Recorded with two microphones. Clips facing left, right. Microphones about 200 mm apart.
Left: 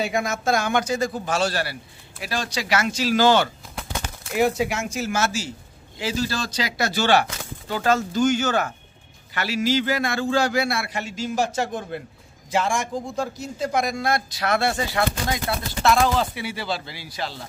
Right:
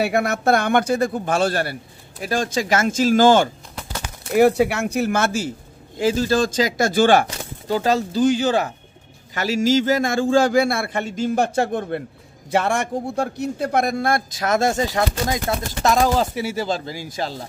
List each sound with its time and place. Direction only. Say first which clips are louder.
0.0 s a man's voice: right 5 dB; 65° right (ahead or behind); by 3.4 s 45° right (ahead or behind)
4.3 s a man's voice: right 6 dB; 65° right (ahead or behind)
7.6 s a man's voice: right 2 dB; 35° right (ahead or behind)